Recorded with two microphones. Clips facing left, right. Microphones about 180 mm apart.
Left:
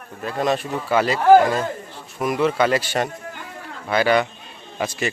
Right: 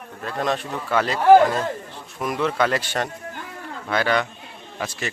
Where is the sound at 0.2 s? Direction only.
5° left (ahead or behind).